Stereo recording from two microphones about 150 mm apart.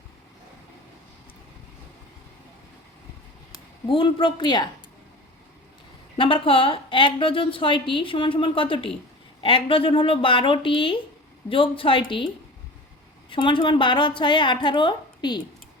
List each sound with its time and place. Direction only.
3.8 s a woman's voice: 35° left (ahead or behind)
6.1 s a woman's voice: 35° left (ahead or behind)
13.3 s a woman's voice: 35° left (ahead or behind)